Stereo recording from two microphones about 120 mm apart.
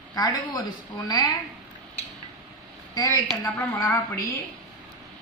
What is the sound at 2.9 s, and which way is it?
Speech, 30° left (ahead or behind).